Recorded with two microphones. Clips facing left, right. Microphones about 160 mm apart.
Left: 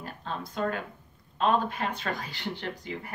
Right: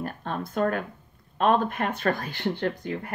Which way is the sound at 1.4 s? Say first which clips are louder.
Right 3 dB; 55° right (ahead or behind).